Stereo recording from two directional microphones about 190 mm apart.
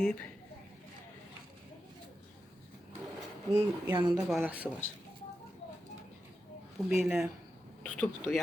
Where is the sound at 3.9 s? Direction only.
25° right (ahead or behind).